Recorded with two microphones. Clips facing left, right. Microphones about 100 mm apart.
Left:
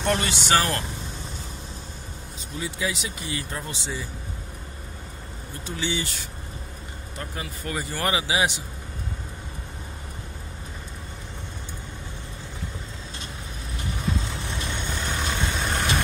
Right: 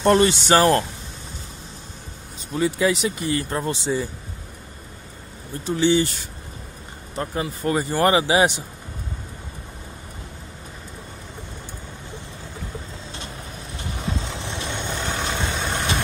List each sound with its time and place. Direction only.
0.0 s speech: 35° right (ahead or behind)
2.5 s speech: 55° right (ahead or behind)
5.8 s speech: 35° right (ahead or behind)
7.2 s speech: 35° right (ahead or behind)
13.9 s vehicle: 30° right (ahead or behind)